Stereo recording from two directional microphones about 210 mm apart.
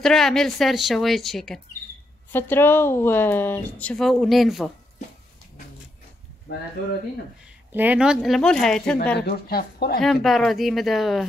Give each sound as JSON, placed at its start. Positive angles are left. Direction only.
{"t": 0.0, "sound": "a woman's voice", "side_deg": 0}
{"t": 7.7, "sound": "a woman's voice", "side_deg": -10}
{"t": 9.2, "sound": "speech", "side_deg": 50}
{"t": 10.0, "sound": "a woman's voice", "side_deg": 0}